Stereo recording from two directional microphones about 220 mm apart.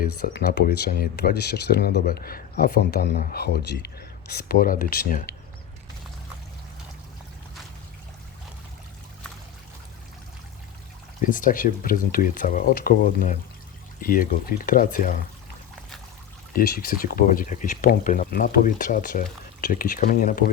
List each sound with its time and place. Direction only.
0.0 s speech: 50° left (ahead or behind)
11.2 s speech: 35° left (ahead or behind)
16.5 s speech: 40° left (ahead or behind)